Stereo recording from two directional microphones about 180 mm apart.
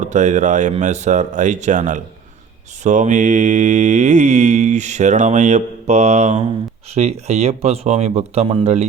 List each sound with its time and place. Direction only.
0.0 s speech: 40° right (ahead or behind)
2.8 s mantra: 40° right (ahead or behind)